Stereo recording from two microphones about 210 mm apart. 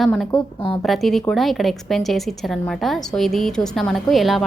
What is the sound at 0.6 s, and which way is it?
Speech, 25° left (ahead or behind).